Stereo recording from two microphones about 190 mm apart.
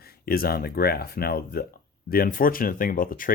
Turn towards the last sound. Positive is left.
turn(degrees=45)  # may be behind; listen again after turning